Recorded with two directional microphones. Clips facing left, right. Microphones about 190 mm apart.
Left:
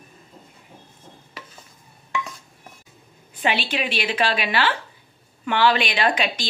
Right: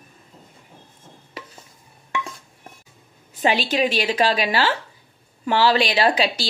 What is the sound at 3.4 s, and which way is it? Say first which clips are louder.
A woman's voice: right 4 dB; 40° right (ahead or behind).